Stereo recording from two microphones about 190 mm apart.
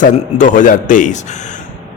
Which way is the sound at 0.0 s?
40° left (ahead or behind).